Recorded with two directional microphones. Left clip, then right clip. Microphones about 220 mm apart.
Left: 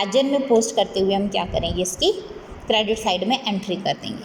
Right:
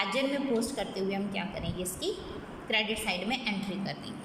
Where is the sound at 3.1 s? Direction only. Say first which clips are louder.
Left 10 dB; 25° left (ahead or behind).